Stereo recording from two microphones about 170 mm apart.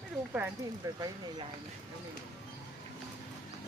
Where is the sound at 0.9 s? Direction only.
20° right (ahead or behind).